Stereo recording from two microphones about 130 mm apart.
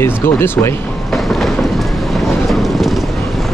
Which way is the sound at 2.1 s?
Centre (ahead or behind).